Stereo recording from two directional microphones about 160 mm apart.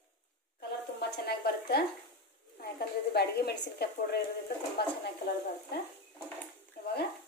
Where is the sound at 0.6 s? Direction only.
90° left.